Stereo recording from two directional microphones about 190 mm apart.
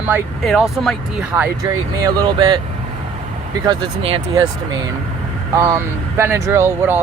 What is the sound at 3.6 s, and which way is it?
Speech, 25° right (ahead or behind).